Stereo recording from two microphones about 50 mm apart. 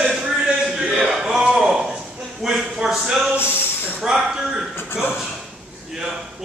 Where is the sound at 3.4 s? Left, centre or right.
Left.